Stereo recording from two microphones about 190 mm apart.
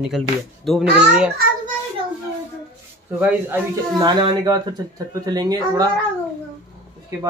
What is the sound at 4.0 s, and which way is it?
Speech, 25° right (ahead or behind).